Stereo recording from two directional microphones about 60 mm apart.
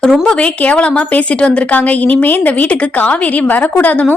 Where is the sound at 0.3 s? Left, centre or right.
Centre.